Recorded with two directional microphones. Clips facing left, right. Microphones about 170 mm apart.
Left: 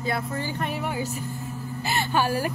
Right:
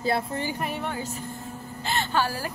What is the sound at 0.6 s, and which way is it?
A woman's voice, centre (ahead or behind).